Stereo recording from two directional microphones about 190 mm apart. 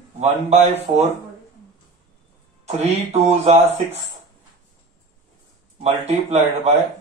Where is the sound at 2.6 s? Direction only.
35° right (ahead or behind).